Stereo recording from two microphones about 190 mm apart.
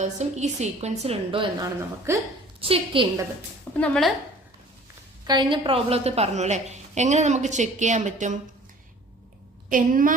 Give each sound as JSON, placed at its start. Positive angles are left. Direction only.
{"t": 0.0, "sound": "a woman's voice", "side_deg": -35}
{"t": 2.1, "sound": "a woman's voice", "side_deg": -15}
{"t": 2.6, "sound": "a woman's voice", "side_deg": -30}
{"t": 3.8, "sound": "speech", "side_deg": 5}
{"t": 5.2, "sound": "a woman's voice", "side_deg": -25}
{"t": 9.6, "sound": "a woman's voice", "side_deg": -45}